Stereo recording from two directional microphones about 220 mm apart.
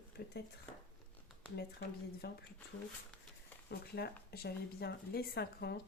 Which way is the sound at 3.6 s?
45° left (ahead or behind).